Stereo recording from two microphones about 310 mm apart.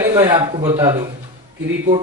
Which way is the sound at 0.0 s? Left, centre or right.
Centre.